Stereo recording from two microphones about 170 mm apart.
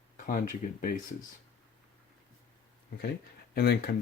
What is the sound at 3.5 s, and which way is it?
Speech, 70° left (ahead or behind).